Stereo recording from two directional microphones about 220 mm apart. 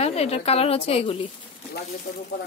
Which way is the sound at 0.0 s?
30° left (ahead or behind).